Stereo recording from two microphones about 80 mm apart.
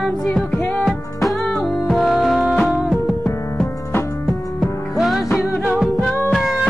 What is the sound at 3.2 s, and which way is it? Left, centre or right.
Music, left.